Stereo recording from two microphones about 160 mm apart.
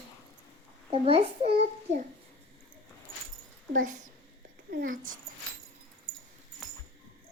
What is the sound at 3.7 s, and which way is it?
A child's voice, 55° right (ahead or behind).